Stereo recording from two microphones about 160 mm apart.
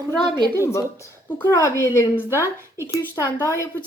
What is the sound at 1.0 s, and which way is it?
A woman's voice, 15° left (ahead or behind).